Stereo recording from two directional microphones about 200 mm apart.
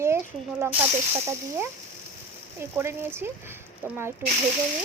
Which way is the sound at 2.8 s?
10° right (ahead or behind).